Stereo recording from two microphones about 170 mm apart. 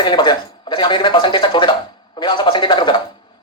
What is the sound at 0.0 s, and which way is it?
Speech, 25° left (ahead or behind).